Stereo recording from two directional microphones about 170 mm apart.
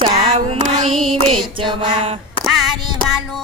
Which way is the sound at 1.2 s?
30° right (ahead or behind).